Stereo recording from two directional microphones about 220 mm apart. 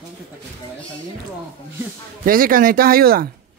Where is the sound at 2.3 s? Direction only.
40° right (ahead or behind).